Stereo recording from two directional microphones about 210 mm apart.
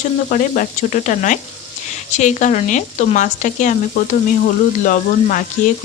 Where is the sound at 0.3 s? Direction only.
40° left (ahead or behind).